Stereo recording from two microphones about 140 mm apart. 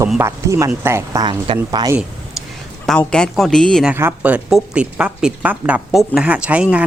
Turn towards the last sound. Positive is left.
turn(degrees=-10)  # may be behind; listen again after turning